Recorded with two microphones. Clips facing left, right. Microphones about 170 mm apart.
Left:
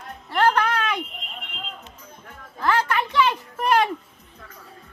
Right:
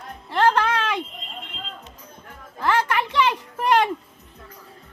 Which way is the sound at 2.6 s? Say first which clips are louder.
Even; 20° right (ahead or behind).